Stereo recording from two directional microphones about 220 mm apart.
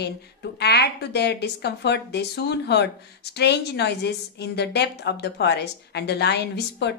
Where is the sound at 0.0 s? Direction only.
50° left (ahead or behind).